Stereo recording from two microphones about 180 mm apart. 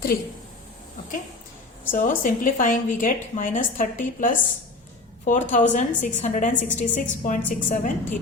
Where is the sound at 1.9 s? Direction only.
45° left (ahead or behind).